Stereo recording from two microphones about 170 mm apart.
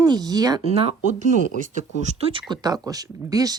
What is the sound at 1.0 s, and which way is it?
Speech, 45° right (ahead or behind).